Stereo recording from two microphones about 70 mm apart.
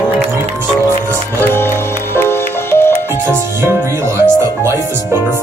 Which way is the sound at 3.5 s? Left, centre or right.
Right.